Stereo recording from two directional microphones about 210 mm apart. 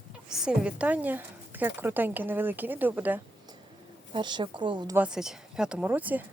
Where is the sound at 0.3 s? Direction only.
5° right (ahead or behind).